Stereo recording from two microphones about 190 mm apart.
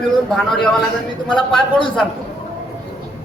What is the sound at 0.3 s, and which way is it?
Speech, centre (ahead or behind).